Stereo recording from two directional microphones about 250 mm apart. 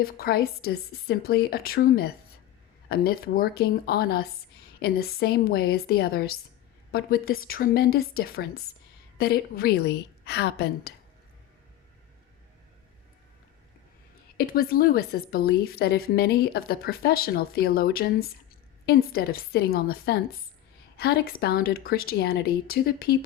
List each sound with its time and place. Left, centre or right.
0.0 s a woman's voice: left
14.3 s a woman's voice: left